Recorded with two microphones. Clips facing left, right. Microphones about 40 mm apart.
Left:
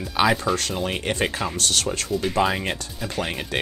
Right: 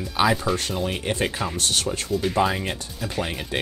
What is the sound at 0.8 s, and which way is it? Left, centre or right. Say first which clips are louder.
Speech: left 1 dB; left.